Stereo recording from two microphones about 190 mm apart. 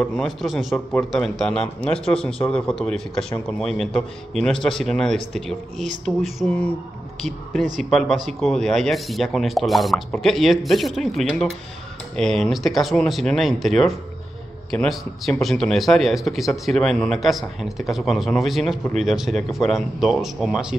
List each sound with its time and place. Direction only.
0.0 s speech: 5° left (ahead or behind)
7.9 s speech: centre (ahead or behind)